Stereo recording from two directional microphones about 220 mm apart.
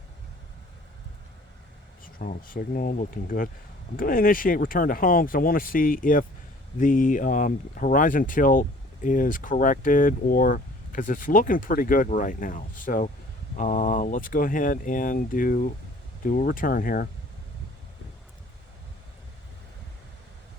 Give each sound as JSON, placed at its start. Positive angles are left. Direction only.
{"t": 2.1, "sound": "speech", "side_deg": 40}